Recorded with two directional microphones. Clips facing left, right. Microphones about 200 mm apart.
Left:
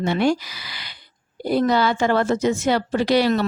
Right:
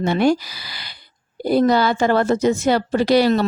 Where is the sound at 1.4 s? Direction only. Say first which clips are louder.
Right 3 dB; 35° right (ahead or behind).